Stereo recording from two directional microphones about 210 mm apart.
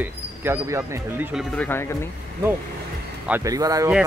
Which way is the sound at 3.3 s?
15° right (ahead or behind).